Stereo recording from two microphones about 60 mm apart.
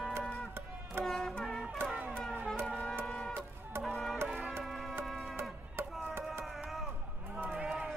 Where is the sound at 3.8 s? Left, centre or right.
Centre.